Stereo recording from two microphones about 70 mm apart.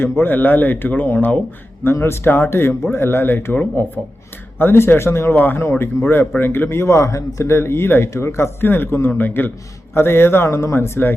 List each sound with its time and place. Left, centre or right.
0.0 s speech: left
1.8 s speech: left
4.6 s speech: left